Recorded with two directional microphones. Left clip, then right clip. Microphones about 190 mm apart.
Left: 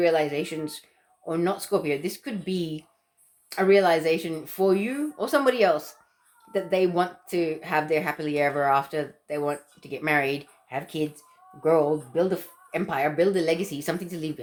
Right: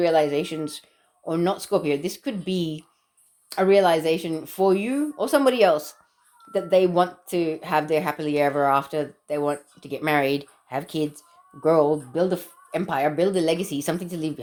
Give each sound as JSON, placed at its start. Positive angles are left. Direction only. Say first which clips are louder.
{"t": 0.0, "sound": "speech", "louder": "right 3 dB", "side_deg": -35}